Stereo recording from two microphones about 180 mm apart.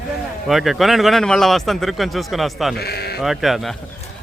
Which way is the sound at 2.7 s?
60° left (ahead or behind).